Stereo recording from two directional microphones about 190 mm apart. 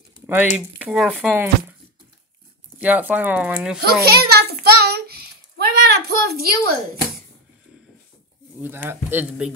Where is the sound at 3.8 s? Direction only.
55° right (ahead or behind).